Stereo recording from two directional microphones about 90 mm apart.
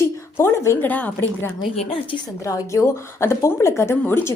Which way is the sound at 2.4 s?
35° left (ahead or behind).